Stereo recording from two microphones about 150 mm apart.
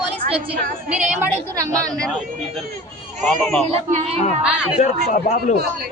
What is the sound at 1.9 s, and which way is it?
Speech, 5° left (ahead or behind).